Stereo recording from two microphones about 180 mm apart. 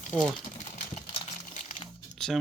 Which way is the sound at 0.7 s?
40° left (ahead or behind).